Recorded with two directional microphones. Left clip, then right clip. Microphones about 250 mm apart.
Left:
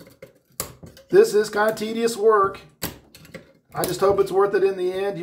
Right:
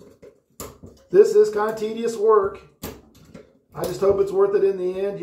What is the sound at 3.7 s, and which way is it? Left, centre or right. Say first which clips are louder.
Speech: left 1 dB; left.